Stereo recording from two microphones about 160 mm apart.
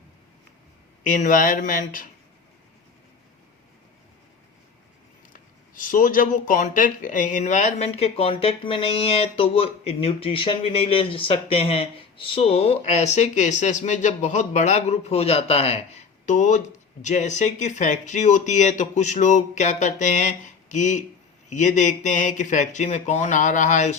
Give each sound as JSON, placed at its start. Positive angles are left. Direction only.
{"t": 1.0, "sound": "speech", "side_deg": 55}
{"t": 5.3, "sound": "speech", "side_deg": 55}